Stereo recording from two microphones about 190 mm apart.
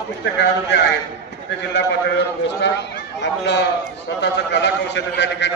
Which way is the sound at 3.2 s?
65° left (ahead or behind).